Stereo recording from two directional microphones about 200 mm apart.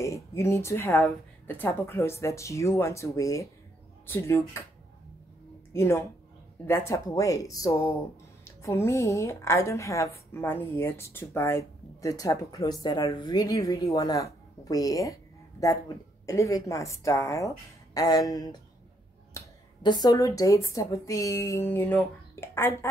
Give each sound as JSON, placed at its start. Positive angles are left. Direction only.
{"t": 0.0, "sound": "speech", "side_deg": 15}
{"t": 5.7, "sound": "a woman's voice", "side_deg": 15}
{"t": 16.3, "sound": "speech", "side_deg": 15}